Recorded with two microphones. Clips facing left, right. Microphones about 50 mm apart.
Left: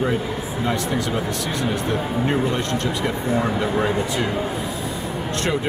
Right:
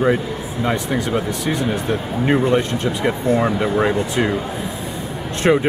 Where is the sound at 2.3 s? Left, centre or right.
Right.